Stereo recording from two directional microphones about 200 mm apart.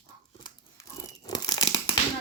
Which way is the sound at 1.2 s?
20° left (ahead or behind).